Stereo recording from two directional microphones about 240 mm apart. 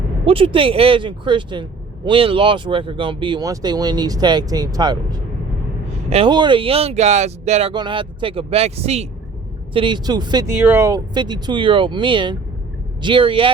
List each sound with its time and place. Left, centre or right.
0.3 s speech: right